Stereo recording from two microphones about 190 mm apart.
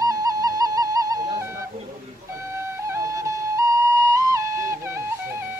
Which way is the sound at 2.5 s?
15° right (ahead or behind).